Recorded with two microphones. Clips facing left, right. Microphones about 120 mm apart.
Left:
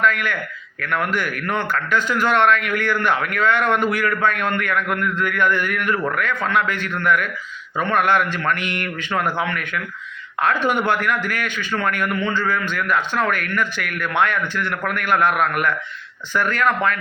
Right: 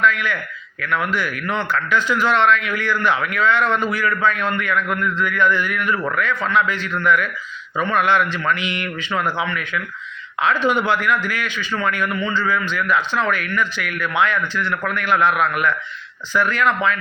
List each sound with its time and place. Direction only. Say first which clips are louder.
0.0 s a man's voice: right 1 dB; 50° left (ahead or behind)